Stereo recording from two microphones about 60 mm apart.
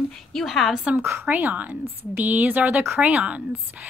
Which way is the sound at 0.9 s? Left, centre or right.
Right.